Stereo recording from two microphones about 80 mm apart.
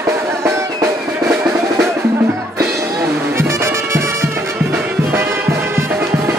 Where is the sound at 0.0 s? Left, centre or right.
Right.